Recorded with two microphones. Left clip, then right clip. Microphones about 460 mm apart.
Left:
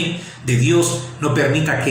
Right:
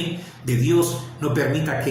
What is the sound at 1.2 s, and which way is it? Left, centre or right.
Speech, right.